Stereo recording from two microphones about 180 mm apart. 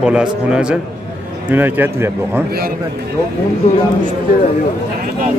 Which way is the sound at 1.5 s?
10° right (ahead or behind).